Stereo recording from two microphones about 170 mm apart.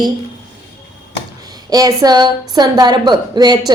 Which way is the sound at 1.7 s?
20° right (ahead or behind).